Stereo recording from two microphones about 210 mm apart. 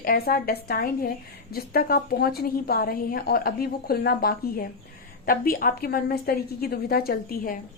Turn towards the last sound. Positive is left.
turn(degrees=45)  # may be behind; listen again after turning